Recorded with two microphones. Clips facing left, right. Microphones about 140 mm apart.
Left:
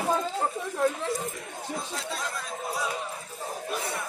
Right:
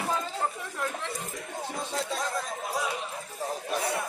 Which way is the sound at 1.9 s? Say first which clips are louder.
Right 3 dB; 35° right (ahead or behind).